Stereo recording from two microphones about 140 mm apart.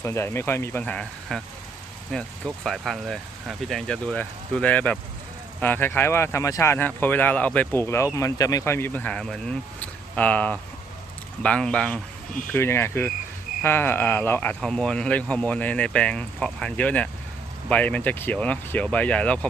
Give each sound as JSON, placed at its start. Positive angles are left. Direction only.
{"t": 0.0, "sound": "speech", "side_deg": 20}
{"t": 12.5, "sound": "speech", "side_deg": 15}